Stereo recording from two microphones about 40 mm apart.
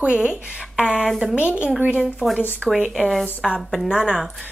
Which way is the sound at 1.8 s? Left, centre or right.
Right.